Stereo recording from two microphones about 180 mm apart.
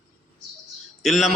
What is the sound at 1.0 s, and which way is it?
Speech, centre (ahead or behind).